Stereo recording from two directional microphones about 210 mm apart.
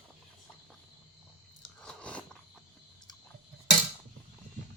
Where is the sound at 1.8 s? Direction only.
5° left (ahead or behind).